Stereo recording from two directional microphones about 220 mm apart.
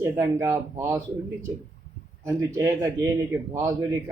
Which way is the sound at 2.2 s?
15° right (ahead or behind).